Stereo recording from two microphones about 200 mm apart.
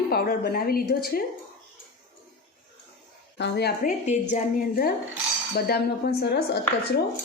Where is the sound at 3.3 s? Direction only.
55° left (ahead or behind).